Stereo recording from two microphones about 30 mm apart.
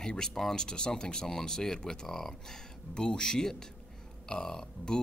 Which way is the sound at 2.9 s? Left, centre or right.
Left.